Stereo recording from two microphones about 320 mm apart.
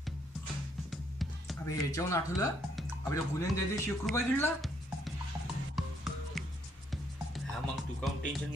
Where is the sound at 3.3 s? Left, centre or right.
Centre.